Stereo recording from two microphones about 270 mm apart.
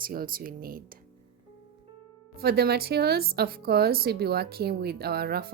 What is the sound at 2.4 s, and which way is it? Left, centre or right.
A woman's voice, right.